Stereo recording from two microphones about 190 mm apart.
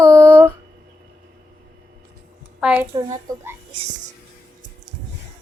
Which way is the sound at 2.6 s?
10° right (ahead or behind).